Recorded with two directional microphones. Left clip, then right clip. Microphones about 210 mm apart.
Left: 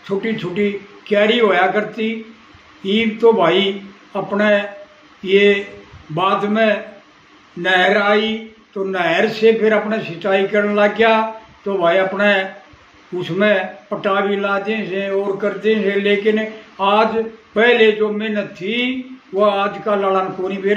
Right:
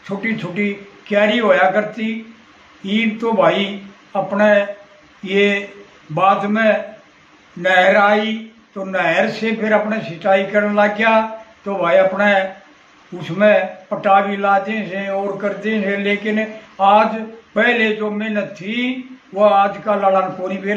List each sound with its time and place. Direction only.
0.2 s a man's voice: 15° right (ahead or behind)
7.6 s a sound: 20° right (ahead or behind)
8.9 s a man's voice: 15° right (ahead or behind)